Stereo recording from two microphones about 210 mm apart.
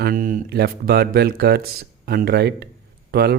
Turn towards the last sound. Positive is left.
turn(degrees=-50)  # may be behind; listen again after turning